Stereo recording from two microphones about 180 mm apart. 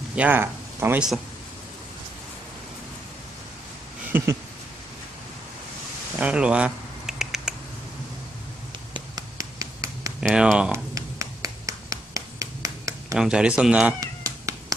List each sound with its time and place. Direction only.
0.1 s speech: 10° right (ahead or behind)
4.1 s a sound: 10° right (ahead or behind)
6.1 s a sound: 5° right (ahead or behind)
8.9 s finger snapping: 20° right (ahead or behind)
10.2 s speech: 5° right (ahead or behind)
11.0 s finger snapping: 20° right (ahead or behind)
13.1 s speech: 5° right (ahead or behind)
13.9 s cat: 15° right (ahead or behind)